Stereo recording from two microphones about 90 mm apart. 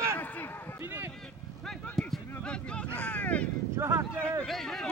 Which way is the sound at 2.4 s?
10° left (ahead or behind).